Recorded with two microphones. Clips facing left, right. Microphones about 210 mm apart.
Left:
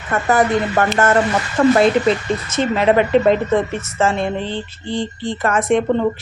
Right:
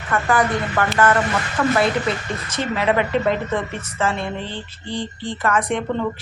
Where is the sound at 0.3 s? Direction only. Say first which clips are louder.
Left 7 dB; 25° left (ahead or behind).